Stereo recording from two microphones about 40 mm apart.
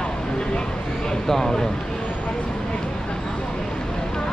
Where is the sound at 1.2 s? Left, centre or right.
Centre.